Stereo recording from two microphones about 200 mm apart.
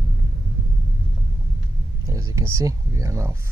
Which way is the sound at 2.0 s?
15° right (ahead or behind).